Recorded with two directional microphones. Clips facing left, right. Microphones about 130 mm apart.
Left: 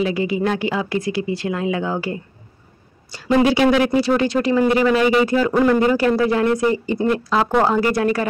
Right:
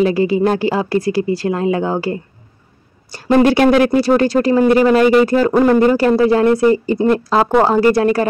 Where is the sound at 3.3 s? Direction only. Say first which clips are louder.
Right 4 dB; 55° right (ahead or behind).